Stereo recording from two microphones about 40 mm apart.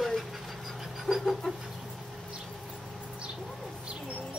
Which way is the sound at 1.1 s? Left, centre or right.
Centre.